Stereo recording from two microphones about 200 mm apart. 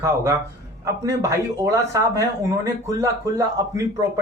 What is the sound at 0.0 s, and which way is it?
Speech, 15° right (ahead or behind).